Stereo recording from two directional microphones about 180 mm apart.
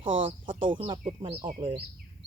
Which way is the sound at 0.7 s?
30° right (ahead or behind).